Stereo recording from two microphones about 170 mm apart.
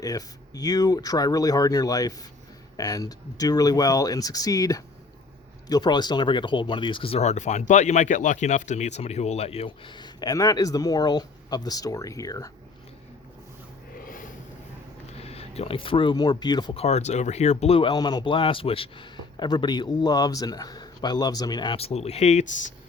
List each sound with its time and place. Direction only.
0.0 s speech: 20° left (ahead or behind)
14.0 s a sound: 50° left (ahead or behind)
15.2 s speech: 35° left (ahead or behind)
16.8 s speech: 40° left (ahead or behind)